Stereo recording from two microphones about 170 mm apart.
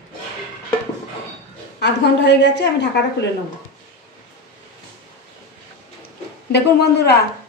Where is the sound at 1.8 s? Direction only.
90° left.